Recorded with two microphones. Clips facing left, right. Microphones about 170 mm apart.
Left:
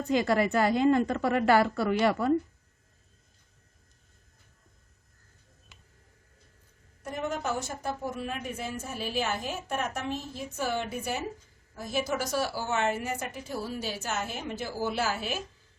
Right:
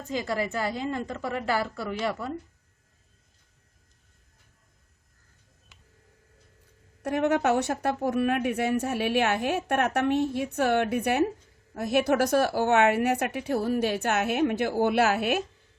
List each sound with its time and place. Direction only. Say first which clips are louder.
0.1 s a woman's voice: left 4 dB; 70° left (ahead or behind)
7.0 s speech: right 8 dB; 70° right (ahead or behind)